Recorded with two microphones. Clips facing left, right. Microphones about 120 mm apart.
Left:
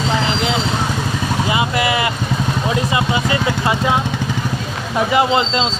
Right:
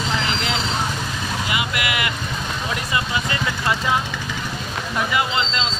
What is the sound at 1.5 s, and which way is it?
Vehicle, 30° left (ahead or behind).